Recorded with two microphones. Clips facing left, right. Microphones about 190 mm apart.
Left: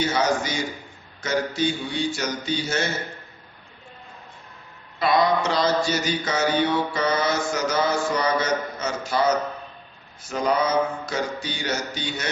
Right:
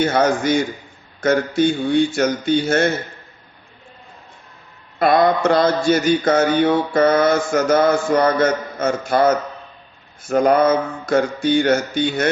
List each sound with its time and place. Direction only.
0.0 s mantra: 55° right (ahead or behind)
4.9 s mantra: 55° right (ahead or behind)